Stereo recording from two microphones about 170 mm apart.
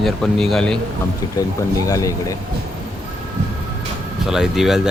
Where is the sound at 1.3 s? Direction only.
20° left (ahead or behind).